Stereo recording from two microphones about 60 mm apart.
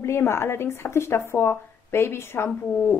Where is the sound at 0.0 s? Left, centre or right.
Left.